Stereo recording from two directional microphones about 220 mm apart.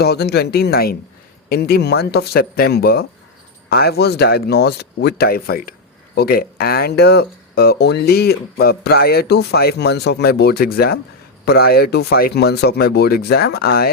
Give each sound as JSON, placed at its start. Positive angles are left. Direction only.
{"t": 0.0, "sound": "speech", "side_deg": 45}